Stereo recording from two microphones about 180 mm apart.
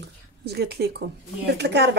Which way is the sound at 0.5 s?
65° right (ahead or behind).